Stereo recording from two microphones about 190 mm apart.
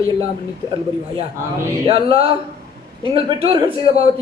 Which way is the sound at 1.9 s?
30° right (ahead or behind).